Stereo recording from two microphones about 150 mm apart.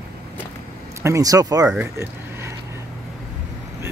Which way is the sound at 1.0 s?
20° right (ahead or behind).